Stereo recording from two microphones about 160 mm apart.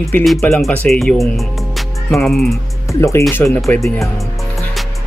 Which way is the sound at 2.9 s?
20° left (ahead or behind).